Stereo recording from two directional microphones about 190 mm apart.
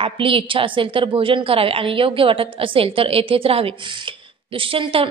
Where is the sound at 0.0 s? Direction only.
30° right (ahead or behind).